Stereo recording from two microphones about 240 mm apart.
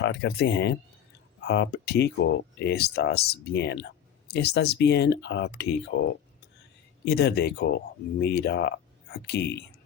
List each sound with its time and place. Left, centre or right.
0.0 s speech: left
7.0 s speech: left